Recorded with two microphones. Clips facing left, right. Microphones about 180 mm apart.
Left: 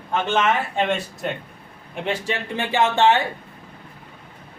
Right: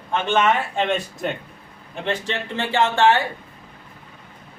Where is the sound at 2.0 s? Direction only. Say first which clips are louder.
Even; 10° left (ahead or behind).